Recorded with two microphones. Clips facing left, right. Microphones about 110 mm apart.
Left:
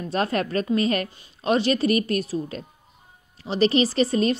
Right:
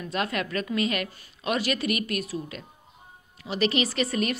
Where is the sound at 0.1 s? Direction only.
35° left (ahead or behind).